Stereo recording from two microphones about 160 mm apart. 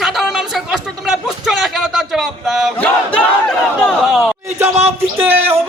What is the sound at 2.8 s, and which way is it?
Battle cry, 5° left (ahead or behind).